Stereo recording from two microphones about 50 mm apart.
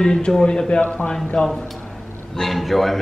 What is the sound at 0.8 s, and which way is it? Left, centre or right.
Speech, left.